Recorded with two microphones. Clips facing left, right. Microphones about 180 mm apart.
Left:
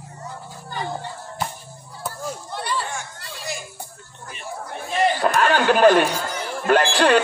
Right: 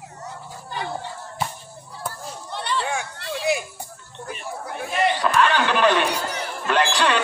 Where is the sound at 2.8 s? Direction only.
60° right (ahead or behind).